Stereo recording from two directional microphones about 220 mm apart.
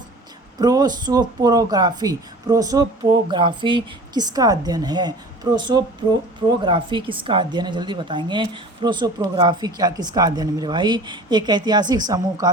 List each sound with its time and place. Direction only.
0.6 s a woman's voice: 15° right (ahead or behind)